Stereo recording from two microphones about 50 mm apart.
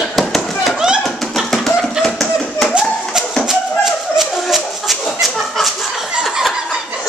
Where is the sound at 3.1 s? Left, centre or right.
Centre.